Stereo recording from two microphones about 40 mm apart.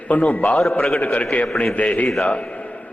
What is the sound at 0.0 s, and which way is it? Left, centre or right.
A man's voice, left.